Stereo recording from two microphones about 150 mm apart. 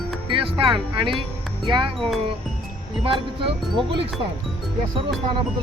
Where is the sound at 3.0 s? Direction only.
40° right (ahead or behind).